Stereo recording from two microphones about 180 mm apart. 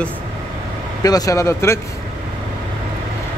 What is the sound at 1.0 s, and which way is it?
Speech, 20° left (ahead or behind).